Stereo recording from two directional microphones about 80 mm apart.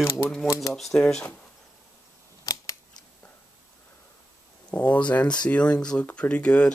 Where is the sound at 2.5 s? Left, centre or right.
Left.